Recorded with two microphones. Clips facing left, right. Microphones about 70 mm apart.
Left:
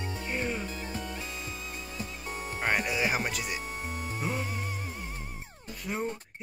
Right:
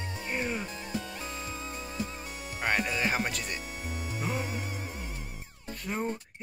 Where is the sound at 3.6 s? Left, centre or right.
Left.